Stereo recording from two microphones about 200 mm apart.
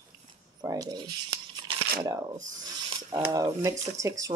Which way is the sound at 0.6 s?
20° right (ahead or behind).